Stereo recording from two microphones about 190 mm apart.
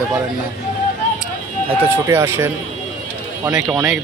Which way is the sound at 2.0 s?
15° right (ahead or behind).